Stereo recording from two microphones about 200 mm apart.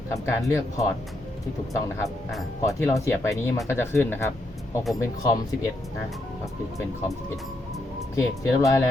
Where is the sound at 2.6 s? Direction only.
15° left (ahead or behind).